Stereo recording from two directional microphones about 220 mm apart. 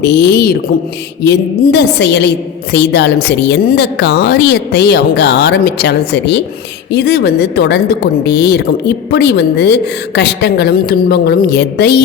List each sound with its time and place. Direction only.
0.0 s a woman's voice: 50° left (ahead or behind)